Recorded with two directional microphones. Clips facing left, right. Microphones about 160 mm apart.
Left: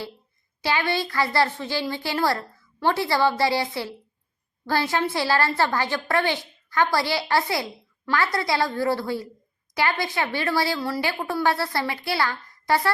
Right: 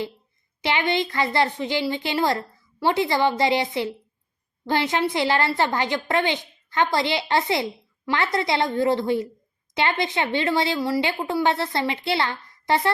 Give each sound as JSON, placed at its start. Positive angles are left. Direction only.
{"t": 0.6, "sound": "a woman's voice", "side_deg": -20}